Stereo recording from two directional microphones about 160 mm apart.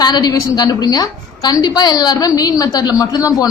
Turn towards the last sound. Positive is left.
turn(degrees=20)  # may be behind; listen again after turning